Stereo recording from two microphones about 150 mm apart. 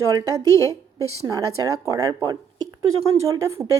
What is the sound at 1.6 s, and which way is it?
Speech, 25° right (ahead or behind).